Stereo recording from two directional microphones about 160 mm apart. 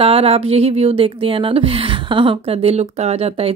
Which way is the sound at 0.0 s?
35° right (ahead or behind).